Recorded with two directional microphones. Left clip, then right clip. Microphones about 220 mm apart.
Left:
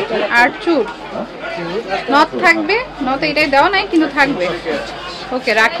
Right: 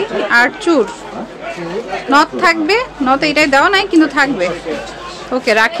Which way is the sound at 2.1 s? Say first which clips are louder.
Right 1 dB; 25° right (ahead or behind).